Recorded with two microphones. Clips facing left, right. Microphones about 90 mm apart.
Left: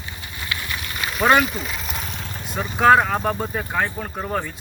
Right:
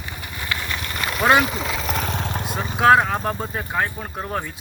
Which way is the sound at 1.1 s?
5° right (ahead or behind).